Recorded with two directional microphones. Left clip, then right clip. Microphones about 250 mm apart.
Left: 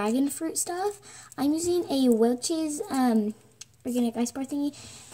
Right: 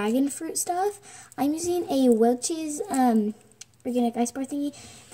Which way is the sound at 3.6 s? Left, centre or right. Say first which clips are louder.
Right 3 dB; centre.